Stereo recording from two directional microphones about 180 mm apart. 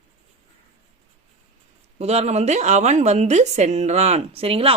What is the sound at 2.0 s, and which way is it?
Speech, 35° right (ahead or behind).